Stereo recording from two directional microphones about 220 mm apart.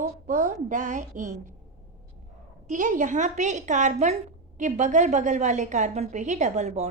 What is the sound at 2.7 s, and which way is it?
A woman's voice, 35° right (ahead or behind).